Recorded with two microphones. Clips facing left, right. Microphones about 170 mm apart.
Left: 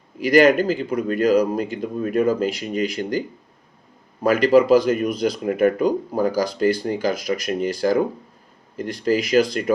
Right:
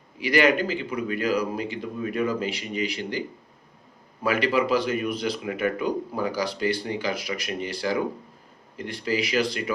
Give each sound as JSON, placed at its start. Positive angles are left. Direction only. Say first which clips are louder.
{"t": 0.2, "sound": "speech", "louder": "left 7 dB", "side_deg": 45}